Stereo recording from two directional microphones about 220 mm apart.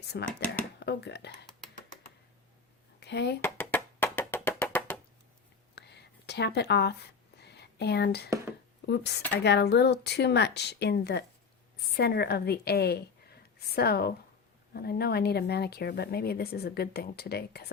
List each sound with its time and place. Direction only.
0.1 s speech: 50° left (ahead or behind)
3.0 s speech: 50° left (ahead or behind)
3.4 s music: 10° left (ahead or behind)
5.7 s a sound: 50° left (ahead or behind)
8.9 s a woman's voice: 50° left (ahead or behind)